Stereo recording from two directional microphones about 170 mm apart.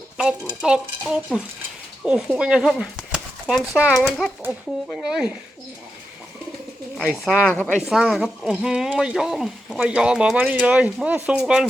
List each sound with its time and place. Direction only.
0.6 s speech: 5° right (ahead or behind)
6.9 s speech: centre (ahead or behind)
7.8 s speech: 5° right (ahead or behind)